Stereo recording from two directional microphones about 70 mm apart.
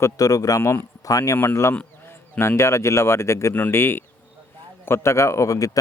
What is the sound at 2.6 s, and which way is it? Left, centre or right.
A man's voice, left.